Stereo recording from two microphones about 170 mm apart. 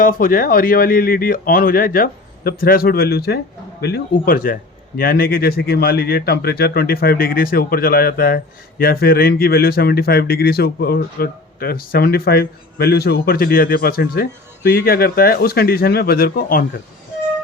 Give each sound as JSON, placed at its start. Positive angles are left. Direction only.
{"t": 0.0, "sound": "speech", "side_deg": 55}